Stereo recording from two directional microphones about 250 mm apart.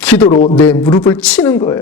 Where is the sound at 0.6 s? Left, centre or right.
Centre.